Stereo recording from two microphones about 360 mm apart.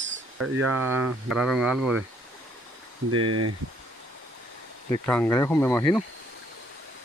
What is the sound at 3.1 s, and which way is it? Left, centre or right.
Speech, right.